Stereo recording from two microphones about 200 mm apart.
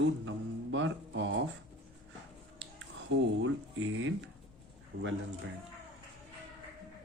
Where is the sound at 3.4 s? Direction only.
70° right (ahead or behind).